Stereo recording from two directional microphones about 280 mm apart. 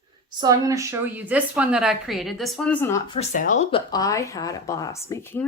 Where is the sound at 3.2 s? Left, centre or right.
Left.